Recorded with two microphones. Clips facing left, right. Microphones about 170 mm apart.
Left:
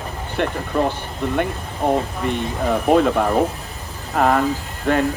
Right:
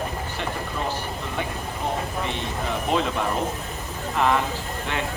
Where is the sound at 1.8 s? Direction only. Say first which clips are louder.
Left 9 dB; 60° left (ahead or behind).